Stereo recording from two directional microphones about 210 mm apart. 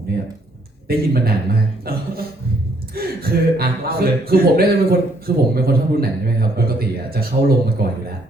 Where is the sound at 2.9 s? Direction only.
45° right (ahead or behind).